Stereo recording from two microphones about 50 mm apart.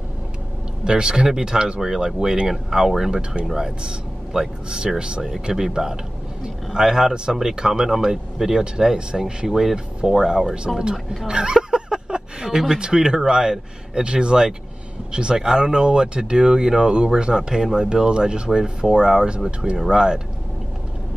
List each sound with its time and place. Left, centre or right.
0.8 s speech: centre